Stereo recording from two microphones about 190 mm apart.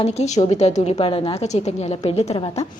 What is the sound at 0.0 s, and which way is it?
A woman's voice, 35° left (ahead or behind).